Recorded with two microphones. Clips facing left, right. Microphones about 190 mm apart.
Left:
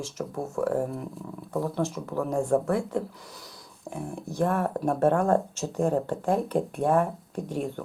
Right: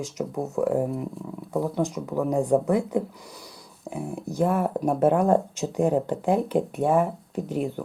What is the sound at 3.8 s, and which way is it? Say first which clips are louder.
Speech: right 3 dB; 5° right (ahead or behind).